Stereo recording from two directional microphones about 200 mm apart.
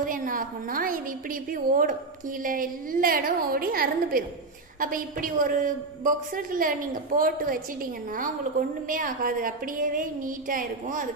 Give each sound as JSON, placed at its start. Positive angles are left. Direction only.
{"t": 0.0, "sound": "a woman's voice", "side_deg": -45}